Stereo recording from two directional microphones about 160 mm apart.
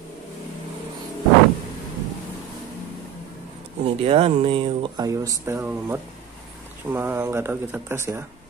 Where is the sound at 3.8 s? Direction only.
35° right (ahead or behind); by 8.2 s 15° right (ahead or behind).